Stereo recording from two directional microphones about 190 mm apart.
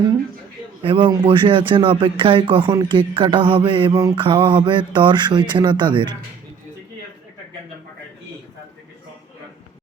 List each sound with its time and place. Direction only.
0.8 s speech: 25° right (ahead or behind)